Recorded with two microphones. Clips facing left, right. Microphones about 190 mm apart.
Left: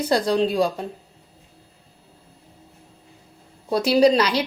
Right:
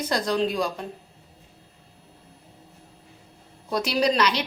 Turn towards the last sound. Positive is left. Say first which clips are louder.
# left 6 dB
turn(degrees=30)  # may be behind; listen again after turning